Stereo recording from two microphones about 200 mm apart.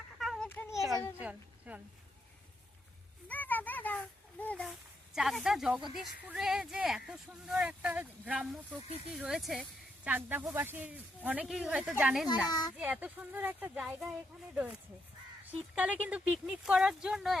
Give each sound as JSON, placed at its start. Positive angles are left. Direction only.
{"t": 0.2, "sound": "a sound", "side_deg": 0}
{"t": 0.7, "sound": "a sound", "side_deg": 0}
{"t": 1.2, "sound": "a woman's voice", "side_deg": -5}
{"t": 3.2, "sound": "speech", "side_deg": 10}
{"t": 12.5, "sound": "speech", "side_deg": 20}
{"t": 12.7, "sound": "speech", "side_deg": -10}